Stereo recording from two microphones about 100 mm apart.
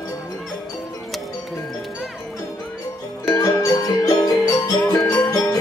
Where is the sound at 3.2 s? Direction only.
35° left (ahead or behind).